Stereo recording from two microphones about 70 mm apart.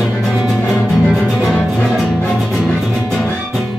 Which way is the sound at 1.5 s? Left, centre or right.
Centre.